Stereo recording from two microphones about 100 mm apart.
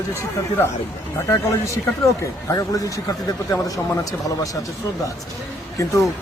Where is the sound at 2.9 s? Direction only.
35° left (ahead or behind).